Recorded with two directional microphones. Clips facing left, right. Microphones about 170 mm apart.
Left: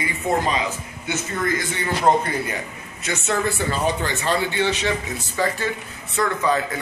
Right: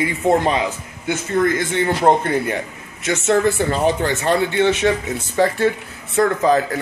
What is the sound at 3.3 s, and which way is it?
Speech, 55° right (ahead or behind).